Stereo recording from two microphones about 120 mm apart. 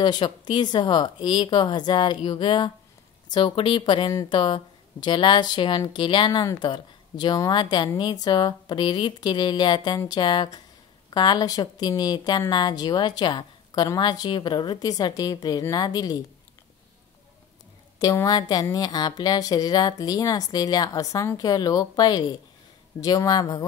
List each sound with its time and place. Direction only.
0.0 s a woman's voice: 40° left (ahead or behind)
17.9 s a woman's voice: 30° left (ahead or behind)